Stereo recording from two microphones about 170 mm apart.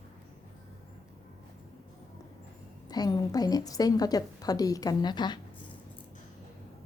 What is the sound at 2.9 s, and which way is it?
A woman's voice, 25° left (ahead or behind).